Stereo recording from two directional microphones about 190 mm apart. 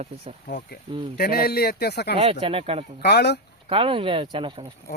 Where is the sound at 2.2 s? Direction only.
30° right (ahead or behind).